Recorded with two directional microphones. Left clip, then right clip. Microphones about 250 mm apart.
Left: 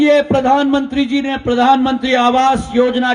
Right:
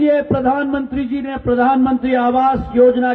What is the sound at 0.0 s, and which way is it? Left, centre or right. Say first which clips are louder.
A man's voice: left 3 dB; left.